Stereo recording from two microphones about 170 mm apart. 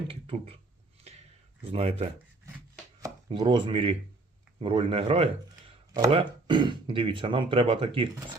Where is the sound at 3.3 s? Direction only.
30° right (ahead or behind).